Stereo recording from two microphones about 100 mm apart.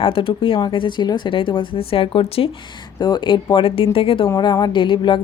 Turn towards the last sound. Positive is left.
turn(degrees=55)  # may be behind; listen again after turning